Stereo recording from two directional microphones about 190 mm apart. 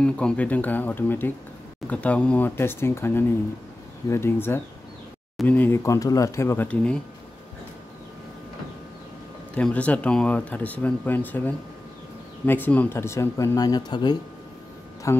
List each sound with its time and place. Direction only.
0.0 s speech: 5° left (ahead or behind)
9.6 s speech: 5° left (ahead or behind)